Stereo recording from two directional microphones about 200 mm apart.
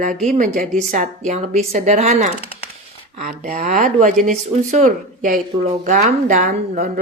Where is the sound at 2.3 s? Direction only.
30° left (ahead or behind).